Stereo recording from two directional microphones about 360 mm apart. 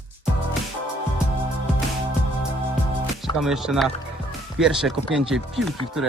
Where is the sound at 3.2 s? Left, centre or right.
Centre.